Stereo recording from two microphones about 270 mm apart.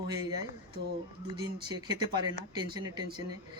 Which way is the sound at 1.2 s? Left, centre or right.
Centre.